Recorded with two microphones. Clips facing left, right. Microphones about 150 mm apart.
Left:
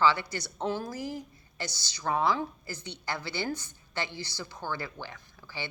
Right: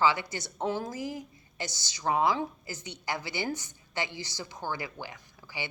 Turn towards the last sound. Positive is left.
turn(degrees=-15)  # may be behind; listen again after turning